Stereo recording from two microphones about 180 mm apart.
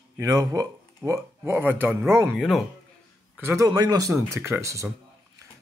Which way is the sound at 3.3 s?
15° right (ahead or behind).